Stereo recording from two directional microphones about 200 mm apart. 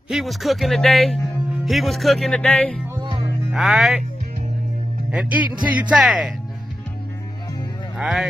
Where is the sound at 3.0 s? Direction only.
25° right (ahead or behind).